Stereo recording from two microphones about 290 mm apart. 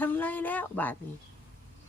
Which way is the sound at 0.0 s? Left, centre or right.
Centre.